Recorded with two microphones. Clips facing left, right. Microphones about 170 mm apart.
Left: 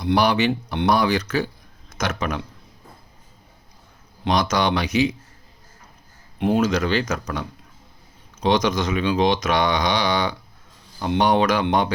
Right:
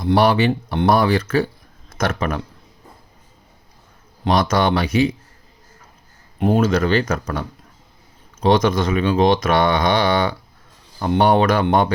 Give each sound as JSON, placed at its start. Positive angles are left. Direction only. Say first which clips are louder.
{"t": 0.0, "sound": "speech", "louder": "right 3 dB", "side_deg": -45}
{"t": 0.4, "sound": "speech", "louder": "right 3 dB", "side_deg": -35}
{"t": 0.9, "sound": "speech", "louder": "right 3 dB", "side_deg": -50}
{"t": 4.2, "sound": "speech", "louder": "right 3 dB", "side_deg": -50}
{"t": 6.4, "sound": "speech", "louder": "right 3 dB", "side_deg": -50}